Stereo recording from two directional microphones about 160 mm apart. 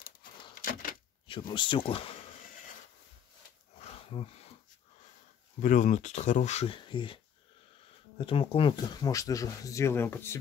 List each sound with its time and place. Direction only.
0.6 s door: 60° left (ahead or behind)
1.5 s speech: 30° left (ahead or behind)
3.8 s a sound: 35° left (ahead or behind)
5.6 s speech: 50° left (ahead or behind); by 7.2 s 30° left (ahead or behind)
8.2 s speech: 35° left (ahead or behind); by 10.4 s 15° left (ahead or behind)